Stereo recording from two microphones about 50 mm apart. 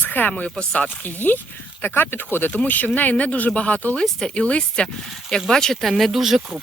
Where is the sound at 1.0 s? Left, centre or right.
Left.